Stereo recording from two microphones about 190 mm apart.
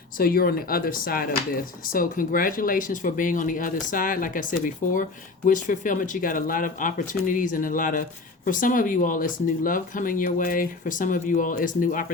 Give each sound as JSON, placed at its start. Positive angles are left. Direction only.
{"t": 0.2, "sound": "speech", "side_deg": 50}